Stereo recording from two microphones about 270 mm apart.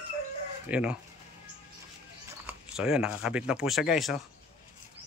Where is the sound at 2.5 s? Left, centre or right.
Centre.